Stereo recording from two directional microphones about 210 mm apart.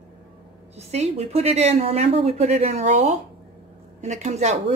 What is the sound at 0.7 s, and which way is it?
A woman's voice, 30° right (ahead or behind).